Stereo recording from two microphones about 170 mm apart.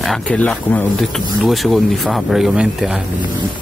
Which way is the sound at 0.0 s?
5° left (ahead or behind).